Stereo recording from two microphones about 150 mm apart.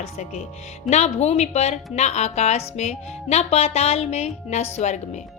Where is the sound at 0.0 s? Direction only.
50° left (ahead or behind).